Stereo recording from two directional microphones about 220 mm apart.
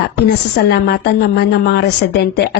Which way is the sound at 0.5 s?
50° left (ahead or behind).